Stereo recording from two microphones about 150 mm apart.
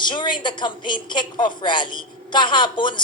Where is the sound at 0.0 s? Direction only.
30° left (ahead or behind).